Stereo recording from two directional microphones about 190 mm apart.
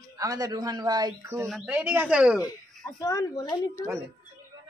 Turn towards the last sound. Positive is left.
turn(degrees=15)  # may be behind; listen again after turning